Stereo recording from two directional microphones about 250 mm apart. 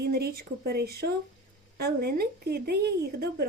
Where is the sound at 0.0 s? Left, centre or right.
Right.